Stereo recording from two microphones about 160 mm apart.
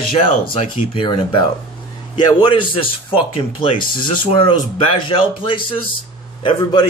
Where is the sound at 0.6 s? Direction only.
30° left (ahead or behind).